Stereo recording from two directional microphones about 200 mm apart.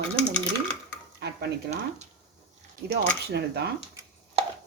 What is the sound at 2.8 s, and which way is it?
Speech, 50° right (ahead or behind).